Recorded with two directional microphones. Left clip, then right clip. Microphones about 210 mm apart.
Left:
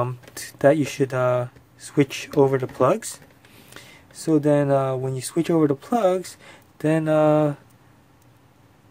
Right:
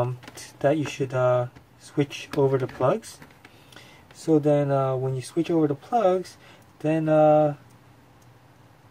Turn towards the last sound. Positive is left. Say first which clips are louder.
# even
turn(degrees=55)  # may be behind; listen again after turning